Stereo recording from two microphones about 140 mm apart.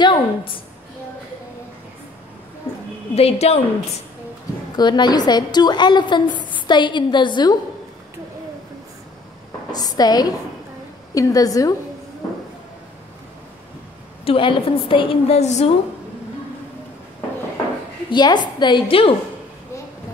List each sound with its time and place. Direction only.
0.0 s a sound: 35° left (ahead or behind)
3.2 s a woman's voice: 45° left (ahead or behind)
4.7 s a woman's voice: 30° left (ahead or behind)
9.7 s a woman's voice: 30° left (ahead or behind)
14.2 s a woman's voice: 40° left (ahead or behind)
18.1 s a woman's voice: 30° left (ahead or behind)